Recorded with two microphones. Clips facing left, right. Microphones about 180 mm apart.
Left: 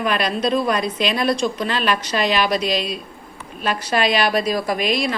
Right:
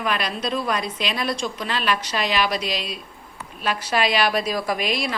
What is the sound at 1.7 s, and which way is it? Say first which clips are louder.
A woman's voice: left 3 dB; 5° right (ahead or behind).